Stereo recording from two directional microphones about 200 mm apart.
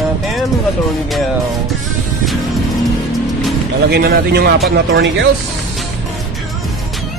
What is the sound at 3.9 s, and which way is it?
Speech, 50° right (ahead or behind).